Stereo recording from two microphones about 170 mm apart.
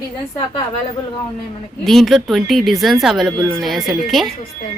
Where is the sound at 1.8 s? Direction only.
Centre (ahead or behind).